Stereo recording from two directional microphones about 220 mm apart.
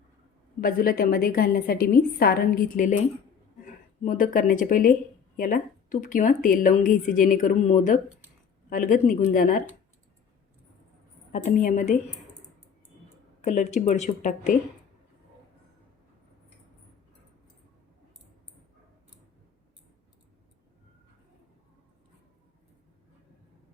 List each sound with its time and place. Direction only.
0.6 s speech: 40° left (ahead or behind)
11.3 s speech: 35° left (ahead or behind)
13.4 s speech: 30° left (ahead or behind)